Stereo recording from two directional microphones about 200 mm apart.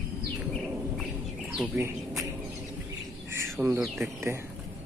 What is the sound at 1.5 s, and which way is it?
Bird, 5° right (ahead or behind).